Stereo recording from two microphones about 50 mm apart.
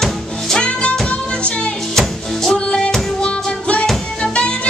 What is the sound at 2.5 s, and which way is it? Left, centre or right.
Music, centre.